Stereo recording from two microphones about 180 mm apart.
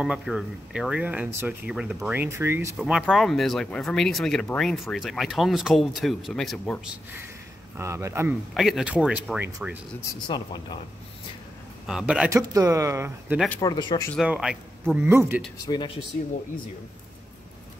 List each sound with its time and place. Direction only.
0.0 s speech: 5° right (ahead or behind)
2.8 s speech: centre (ahead or behind)
7.7 s speech: 15° right (ahead or behind)
8.5 s speech: centre (ahead or behind)
10.2 s speech: 25° left (ahead or behind)
11.8 s speech: 5° right (ahead or behind)
12.3 s speech: 20° right (ahead or behind)
13.6 s speech: 25° left (ahead or behind)
14.1 s speech: 5° right (ahead or behind)
15.6 s speech: 25° left (ahead or behind)